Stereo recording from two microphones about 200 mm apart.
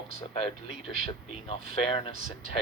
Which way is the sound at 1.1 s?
30° left (ahead or behind).